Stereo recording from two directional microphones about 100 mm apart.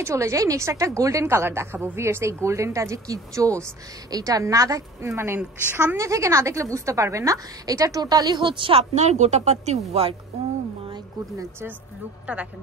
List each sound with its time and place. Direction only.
0.0 s a woman's voice: 30° right (ahead or behind)
5.7 s a woman's voice: 15° right (ahead or behind)
5.9 s a woman's voice: 30° right (ahead or behind); by 10.1 s 90° right
12.3 s a woman's voice: 10° right (ahead or behind)